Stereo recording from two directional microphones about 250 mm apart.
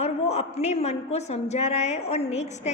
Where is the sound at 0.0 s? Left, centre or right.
Left.